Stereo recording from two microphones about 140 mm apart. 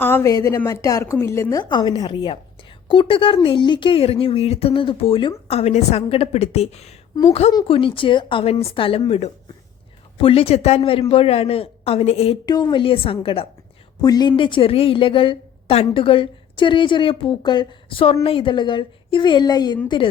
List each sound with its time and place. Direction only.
0.0 s a woman's voice: 20° left (ahead or behind); by 6.9 s 50° left (ahead or behind)
7.5 s a woman's voice: 40° left (ahead or behind)
12.5 s a woman's voice: 30° left (ahead or behind)
14.0 s a woman's voice: 30° left (ahead or behind)